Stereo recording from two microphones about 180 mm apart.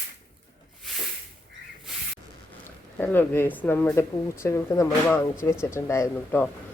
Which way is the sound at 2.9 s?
10° left (ahead or behind).